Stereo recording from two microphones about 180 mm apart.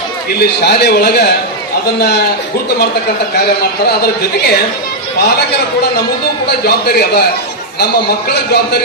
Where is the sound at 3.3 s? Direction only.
60° left (ahead or behind).